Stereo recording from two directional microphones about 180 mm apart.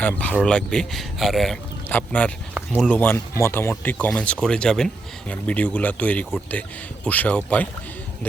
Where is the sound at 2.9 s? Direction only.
10° left (ahead or behind).